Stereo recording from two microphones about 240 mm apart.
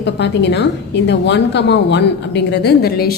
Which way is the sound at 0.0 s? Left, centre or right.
Left.